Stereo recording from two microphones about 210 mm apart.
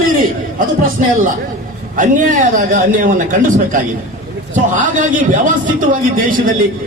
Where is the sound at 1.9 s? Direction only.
40° right (ahead or behind).